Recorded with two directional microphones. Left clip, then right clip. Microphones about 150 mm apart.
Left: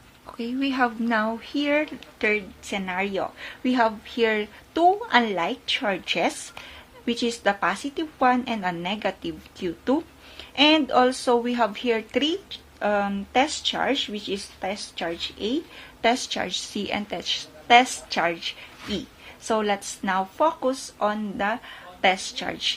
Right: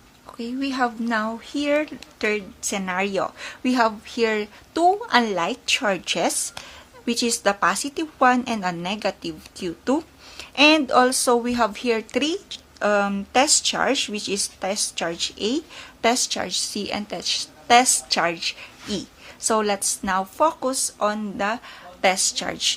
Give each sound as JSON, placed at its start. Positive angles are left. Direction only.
{"t": 0.3, "sound": "a woman's voice", "side_deg": -10}